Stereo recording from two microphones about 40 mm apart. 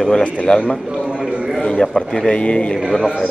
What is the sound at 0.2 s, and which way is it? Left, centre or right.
A man's voice, left.